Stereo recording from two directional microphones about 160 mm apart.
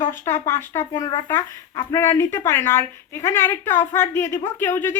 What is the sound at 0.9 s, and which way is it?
Speech, 30° left (ahead or behind).